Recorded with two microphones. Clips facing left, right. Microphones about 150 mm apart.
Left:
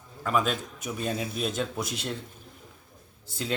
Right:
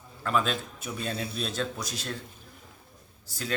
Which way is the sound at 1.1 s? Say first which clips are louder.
Left 2 dB; 45° left (ahead or behind).